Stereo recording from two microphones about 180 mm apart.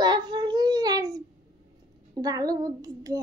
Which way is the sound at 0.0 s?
25° right (ahead or behind).